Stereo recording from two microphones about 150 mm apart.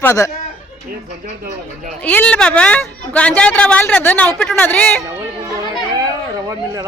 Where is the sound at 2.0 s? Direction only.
10° left (ahead or behind).